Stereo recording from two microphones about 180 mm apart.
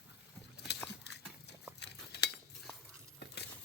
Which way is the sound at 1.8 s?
70° left (ahead or behind).